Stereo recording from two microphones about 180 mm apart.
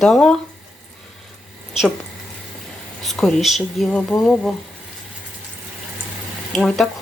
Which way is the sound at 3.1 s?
Centre (ahead or behind).